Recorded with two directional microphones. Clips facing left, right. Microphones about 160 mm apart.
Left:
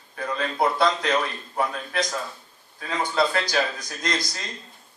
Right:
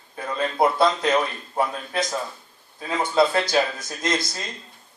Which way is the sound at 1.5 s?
25° right (ahead or behind).